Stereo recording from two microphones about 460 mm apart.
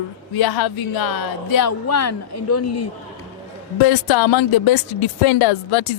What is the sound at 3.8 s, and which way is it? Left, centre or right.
Speech, left.